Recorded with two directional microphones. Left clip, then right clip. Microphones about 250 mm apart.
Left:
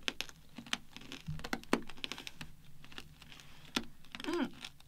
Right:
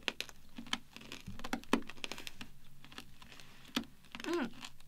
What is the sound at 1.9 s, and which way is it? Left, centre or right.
Computer keyboard, right.